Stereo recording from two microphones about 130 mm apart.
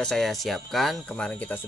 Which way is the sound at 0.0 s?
5° left (ahead or behind).